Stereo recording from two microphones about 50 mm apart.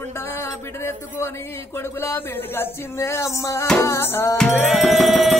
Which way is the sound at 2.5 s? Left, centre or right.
Left.